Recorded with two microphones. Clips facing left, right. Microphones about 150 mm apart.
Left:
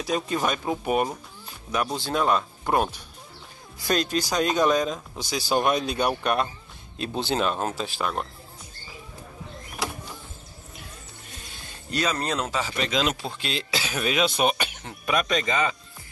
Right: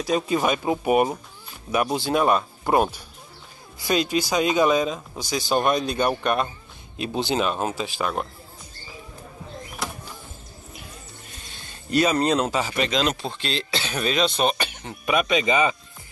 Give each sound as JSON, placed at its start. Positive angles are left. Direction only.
{"t": 0.0, "sound": "speech", "side_deg": -5}
{"t": 11.9, "sound": "speech", "side_deg": -10}
{"t": 12.8, "sound": "speech", "side_deg": 5}